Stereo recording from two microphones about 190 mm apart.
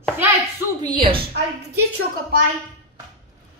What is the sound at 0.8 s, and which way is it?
Speech, 25° right (ahead or behind).